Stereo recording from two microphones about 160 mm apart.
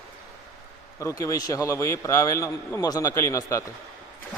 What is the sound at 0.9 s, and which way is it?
A man's voice, 20° left (ahead or behind).